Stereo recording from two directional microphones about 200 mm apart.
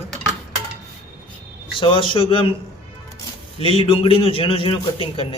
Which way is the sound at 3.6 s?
30° left (ahead or behind).